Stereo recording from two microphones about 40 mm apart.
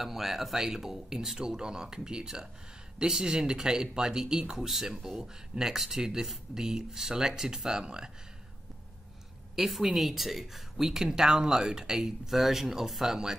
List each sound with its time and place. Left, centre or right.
0.0 s speech: centre
9.6 s speech: centre